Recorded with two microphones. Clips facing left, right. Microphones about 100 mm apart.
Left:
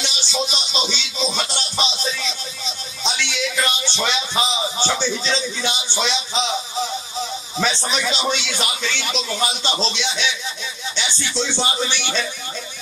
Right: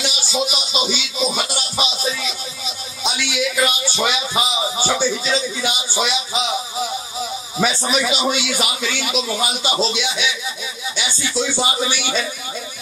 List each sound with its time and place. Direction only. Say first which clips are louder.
0.0 s music: right 3 dB; 10° right (ahead or behind)